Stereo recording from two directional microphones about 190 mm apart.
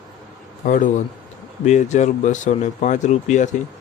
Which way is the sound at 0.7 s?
45° left (ahead or behind).